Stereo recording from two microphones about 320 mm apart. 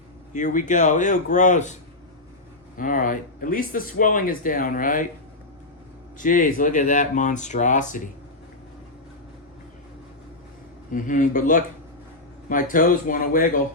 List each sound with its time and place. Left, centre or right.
0.3 s speech: left
2.7 s speech: left
6.1 s speech: left
10.9 s speech: left